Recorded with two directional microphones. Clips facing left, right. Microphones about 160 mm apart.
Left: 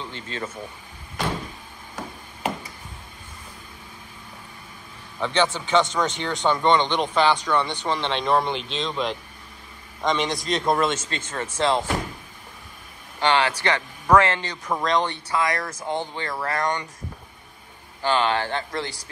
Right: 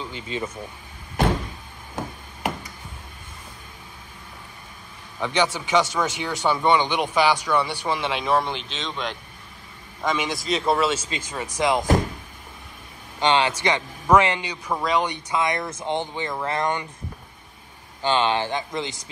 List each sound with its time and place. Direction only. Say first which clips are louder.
0.0 s speech: right 2 dB; 10° right (ahead or behind)
5.2 s speech: even; 10° right (ahead or behind)
13.2 s speech: right 1 dB; 20° right (ahead or behind)
18.0 s speech: even; 20° right (ahead or behind)